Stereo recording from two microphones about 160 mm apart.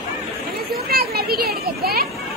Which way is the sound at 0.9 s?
75° right (ahead or behind).